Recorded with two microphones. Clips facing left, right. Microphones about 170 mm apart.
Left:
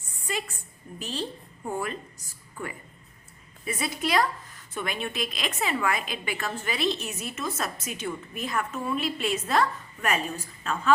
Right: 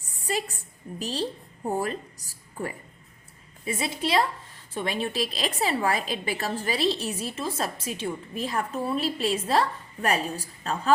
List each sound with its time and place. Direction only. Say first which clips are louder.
0.3 s a woman's voice: right 3 dB; 35° right (ahead or behind)
3.7 s a woman's voice: right 1 dB; 25° right (ahead or behind)